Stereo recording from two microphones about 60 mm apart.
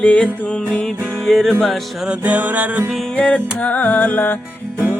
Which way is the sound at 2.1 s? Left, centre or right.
Right.